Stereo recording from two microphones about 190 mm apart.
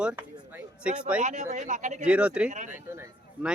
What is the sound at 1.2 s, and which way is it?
Speech, 40° right (ahead or behind).